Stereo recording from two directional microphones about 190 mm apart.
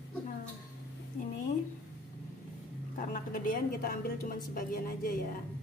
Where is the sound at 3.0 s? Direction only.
45° left (ahead or behind).